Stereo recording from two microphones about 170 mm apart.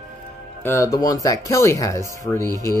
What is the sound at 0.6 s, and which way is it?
Speech, 15° left (ahead or behind).